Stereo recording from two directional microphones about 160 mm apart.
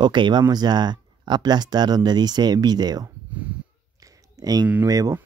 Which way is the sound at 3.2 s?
10° right (ahead or behind).